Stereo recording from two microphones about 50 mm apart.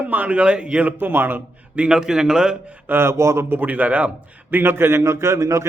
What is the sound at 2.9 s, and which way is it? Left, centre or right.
Speech, right.